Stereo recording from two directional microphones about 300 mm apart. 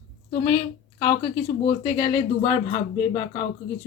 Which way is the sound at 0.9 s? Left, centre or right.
Centre.